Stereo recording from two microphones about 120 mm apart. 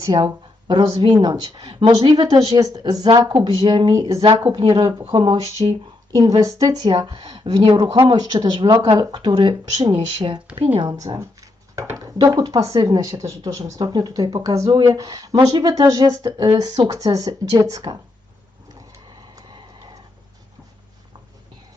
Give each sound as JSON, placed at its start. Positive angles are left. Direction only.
{"t": 0.0, "sound": "speech", "side_deg": -35}
{"t": 10.8, "sound": "a sound", "side_deg": -30}
{"t": 12.1, "sound": "speech", "side_deg": -35}